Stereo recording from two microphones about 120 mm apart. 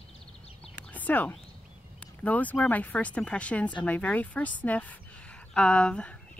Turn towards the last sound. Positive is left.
turn(degrees=10)  # may be behind; listen again after turning